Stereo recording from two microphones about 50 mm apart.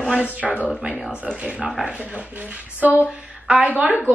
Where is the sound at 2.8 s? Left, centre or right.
Right.